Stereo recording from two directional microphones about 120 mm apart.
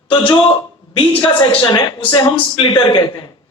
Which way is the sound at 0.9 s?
45° left (ahead or behind).